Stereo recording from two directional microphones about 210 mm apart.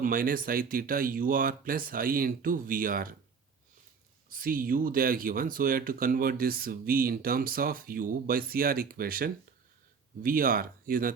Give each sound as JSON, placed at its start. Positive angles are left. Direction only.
{"t": 0.0, "sound": "speech", "side_deg": -40}
{"t": 4.3, "sound": "speech", "side_deg": -40}